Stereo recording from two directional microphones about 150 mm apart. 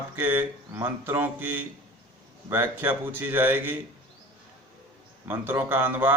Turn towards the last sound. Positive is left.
turn(degrees=-15)  # may be behind; listen again after turning